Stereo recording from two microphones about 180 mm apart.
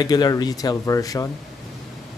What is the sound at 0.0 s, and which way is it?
A man's voice, 20° left (ahead or behind).